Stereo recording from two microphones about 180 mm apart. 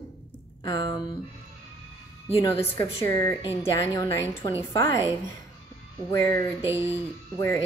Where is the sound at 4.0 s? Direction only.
15° left (ahead or behind).